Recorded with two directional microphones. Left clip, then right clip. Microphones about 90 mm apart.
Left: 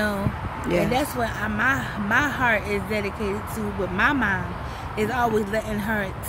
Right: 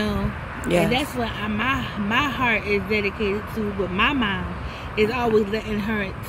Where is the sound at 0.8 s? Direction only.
30° left (ahead or behind).